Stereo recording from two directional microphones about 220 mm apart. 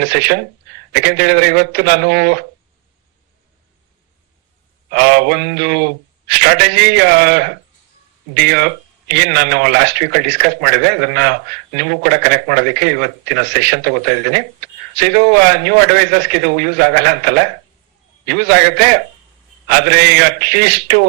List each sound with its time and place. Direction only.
0.0 s speech: 50° right (ahead or behind)
4.9 s speech: 45° right (ahead or behind)